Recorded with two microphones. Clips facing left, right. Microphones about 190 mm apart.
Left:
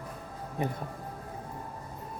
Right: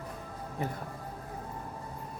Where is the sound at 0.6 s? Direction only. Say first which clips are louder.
Left 3 dB; 20° left (ahead or behind).